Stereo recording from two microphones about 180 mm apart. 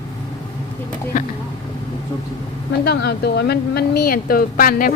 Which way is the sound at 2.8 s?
65° left (ahead or behind).